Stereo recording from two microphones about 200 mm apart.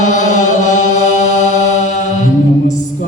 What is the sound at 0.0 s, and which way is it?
Chant, 40° left (ahead or behind).